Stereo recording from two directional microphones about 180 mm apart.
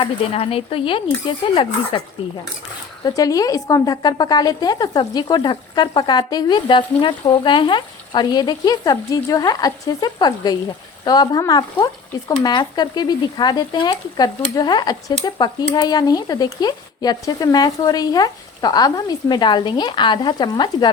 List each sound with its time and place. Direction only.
0.0 s speech: 30° left (ahead or behind)
3.0 s a woman's voice: 20° left (ahead or behind)